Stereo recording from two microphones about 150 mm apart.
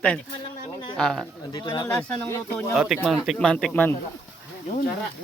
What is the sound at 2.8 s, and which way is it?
Speech, 10° right (ahead or behind).